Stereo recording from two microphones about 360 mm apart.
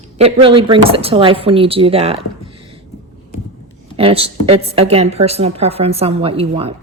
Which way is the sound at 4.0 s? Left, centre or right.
Centre.